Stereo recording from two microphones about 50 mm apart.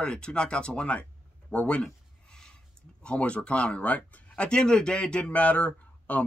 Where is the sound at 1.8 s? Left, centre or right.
Centre.